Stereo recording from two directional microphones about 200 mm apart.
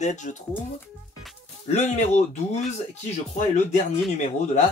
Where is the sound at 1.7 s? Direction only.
35° left (ahead or behind).